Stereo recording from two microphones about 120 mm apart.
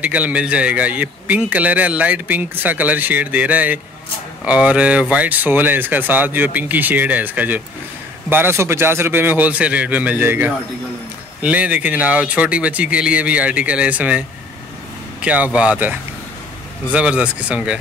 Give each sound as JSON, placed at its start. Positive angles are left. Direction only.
{"t": 0.0, "sound": "a man's voice", "side_deg": -10}
{"t": 15.2, "sound": "a man's voice", "side_deg": -10}